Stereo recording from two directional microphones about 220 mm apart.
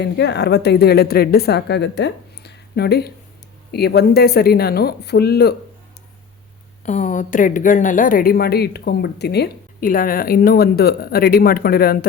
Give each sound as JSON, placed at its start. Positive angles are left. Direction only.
{"t": 0.0, "sound": "a woman's voice", "side_deg": 50}
{"t": 6.8, "sound": "a woman's voice", "side_deg": 35}